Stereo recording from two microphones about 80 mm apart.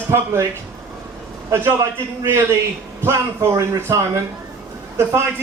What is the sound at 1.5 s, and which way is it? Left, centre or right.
A man's voice, right.